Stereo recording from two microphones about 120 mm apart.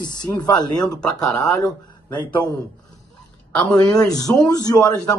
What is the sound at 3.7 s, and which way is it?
Speech, 30° left (ahead or behind).